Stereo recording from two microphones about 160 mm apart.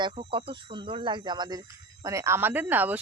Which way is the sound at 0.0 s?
35° right (ahead or behind).